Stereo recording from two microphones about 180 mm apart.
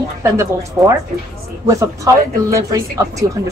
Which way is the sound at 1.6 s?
20° right (ahead or behind).